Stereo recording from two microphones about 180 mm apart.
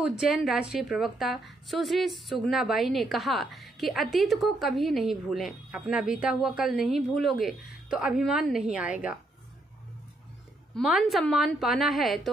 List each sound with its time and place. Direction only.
0.0 s a woman's voice: 5° right (ahead or behind)
10.8 s a woman's voice: centre (ahead or behind)